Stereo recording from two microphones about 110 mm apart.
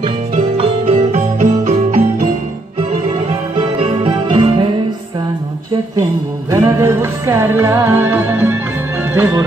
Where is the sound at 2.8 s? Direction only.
70° right (ahead or behind).